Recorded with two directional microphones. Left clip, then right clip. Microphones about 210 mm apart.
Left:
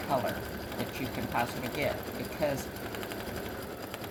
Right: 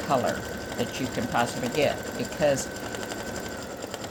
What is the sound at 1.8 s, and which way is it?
Speech, 45° right (ahead or behind).